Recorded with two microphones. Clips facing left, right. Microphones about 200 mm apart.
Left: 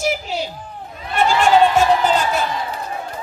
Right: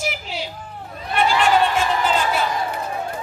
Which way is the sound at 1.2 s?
45° left (ahead or behind).